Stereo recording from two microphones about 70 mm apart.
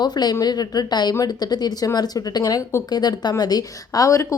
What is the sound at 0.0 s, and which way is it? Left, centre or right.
A woman's voice, left.